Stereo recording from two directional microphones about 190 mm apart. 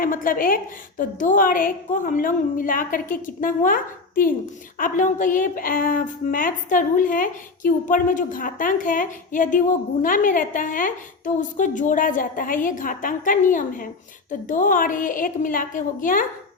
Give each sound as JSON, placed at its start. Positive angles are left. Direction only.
{"t": 0.0, "sound": "a woman's voice", "side_deg": 45}